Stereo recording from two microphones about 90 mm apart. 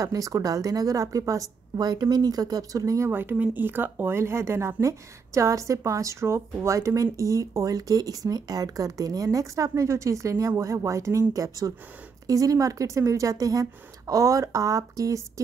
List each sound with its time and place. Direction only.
0.0 s speech: 40° right (ahead or behind)
3.1 s speech: 20° right (ahead or behind); by 15.4 s 35° right (ahead or behind)